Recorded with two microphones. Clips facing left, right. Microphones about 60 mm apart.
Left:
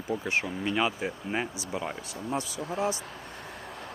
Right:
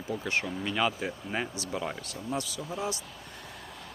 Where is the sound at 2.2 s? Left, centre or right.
Left.